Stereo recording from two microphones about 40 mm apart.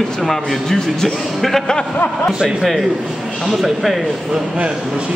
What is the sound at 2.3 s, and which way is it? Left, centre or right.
Speech, right.